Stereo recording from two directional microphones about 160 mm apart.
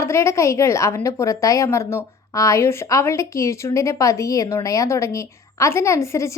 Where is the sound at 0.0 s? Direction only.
15° left (ahead or behind).